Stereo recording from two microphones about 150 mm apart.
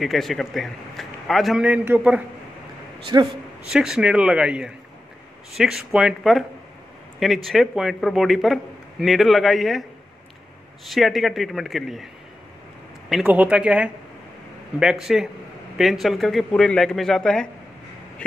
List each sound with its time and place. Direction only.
0.0 s a man's voice: centre (ahead or behind)
3.1 s speech: 30° right (ahead or behind)
3.7 s a man's voice: 5° right (ahead or behind)
10.9 s a man's voice: centre (ahead or behind)
13.1 s a man's voice: 10° right (ahead or behind)